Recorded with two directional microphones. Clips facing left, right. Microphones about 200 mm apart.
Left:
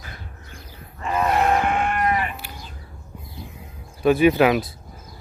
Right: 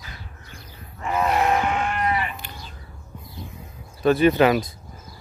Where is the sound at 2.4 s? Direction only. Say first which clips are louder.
Left 1 dB; 10° left (ahead or behind).